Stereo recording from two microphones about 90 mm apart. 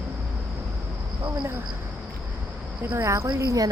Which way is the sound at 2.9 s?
30° right (ahead or behind).